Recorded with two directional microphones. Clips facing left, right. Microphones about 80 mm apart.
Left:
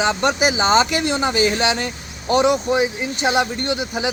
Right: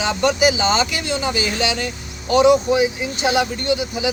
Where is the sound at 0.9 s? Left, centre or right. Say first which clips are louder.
Left 3 dB; left.